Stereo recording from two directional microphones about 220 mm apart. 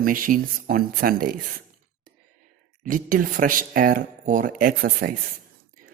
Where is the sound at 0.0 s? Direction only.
40° right (ahead or behind).